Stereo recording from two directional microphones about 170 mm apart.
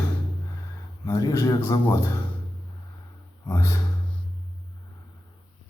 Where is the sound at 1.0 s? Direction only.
20° left (ahead or behind).